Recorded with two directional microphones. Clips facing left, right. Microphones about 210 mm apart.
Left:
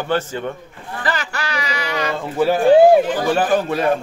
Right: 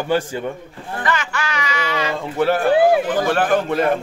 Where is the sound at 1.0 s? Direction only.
35° left (ahead or behind).